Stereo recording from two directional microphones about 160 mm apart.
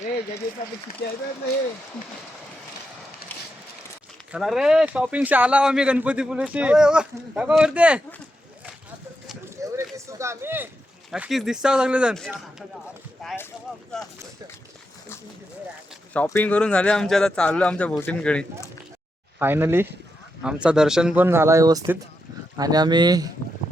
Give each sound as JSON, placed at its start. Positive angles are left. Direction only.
{"t": 4.3, "sound": "speech", "side_deg": -5}
{"t": 9.6, "sound": "a sound", "side_deg": -20}
{"t": 9.9, "sound": "speech", "side_deg": -20}
{"t": 11.1, "sound": "speech", "side_deg": 0}
{"t": 13.2, "sound": "speech", "side_deg": 0}
{"t": 16.1, "sound": "speech", "side_deg": 10}
{"t": 19.4, "sound": "speech", "side_deg": -15}